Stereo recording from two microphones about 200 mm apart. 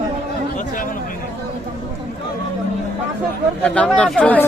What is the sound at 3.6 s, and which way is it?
Speech, 5° left (ahead or behind).